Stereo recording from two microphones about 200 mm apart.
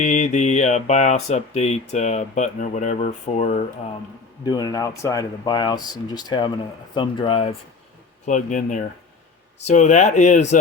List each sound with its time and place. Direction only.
0.0 s speech: 35° left (ahead or behind)
4.4 s speech: 20° left (ahead or behind)
8.3 s speech: 40° left (ahead or behind)